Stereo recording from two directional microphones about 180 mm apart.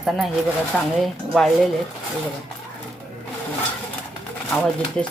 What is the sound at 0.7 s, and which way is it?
Speech, centre (ahead or behind).